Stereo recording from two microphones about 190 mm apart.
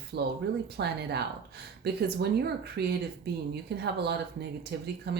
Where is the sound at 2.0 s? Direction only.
60° right (ahead or behind).